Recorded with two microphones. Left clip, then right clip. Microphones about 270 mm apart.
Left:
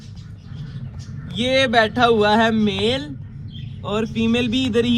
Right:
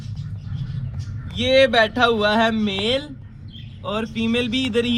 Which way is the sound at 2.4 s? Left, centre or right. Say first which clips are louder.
Left 2 dB; centre.